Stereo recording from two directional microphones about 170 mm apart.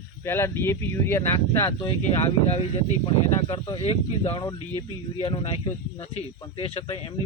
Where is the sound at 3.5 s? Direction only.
35° left (ahead or behind).